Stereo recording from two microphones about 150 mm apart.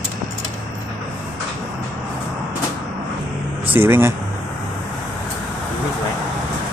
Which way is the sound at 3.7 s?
15° right (ahead or behind).